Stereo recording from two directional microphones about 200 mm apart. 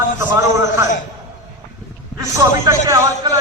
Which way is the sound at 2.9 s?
20° right (ahead or behind).